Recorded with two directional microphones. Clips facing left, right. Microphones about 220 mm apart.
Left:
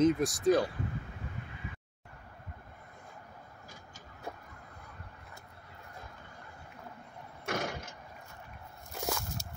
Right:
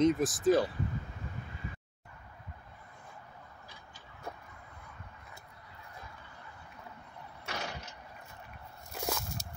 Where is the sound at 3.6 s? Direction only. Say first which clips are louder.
Left 2 dB; 45° left (ahead or behind).